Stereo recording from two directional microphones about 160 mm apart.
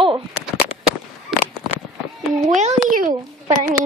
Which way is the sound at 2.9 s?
60° right (ahead or behind).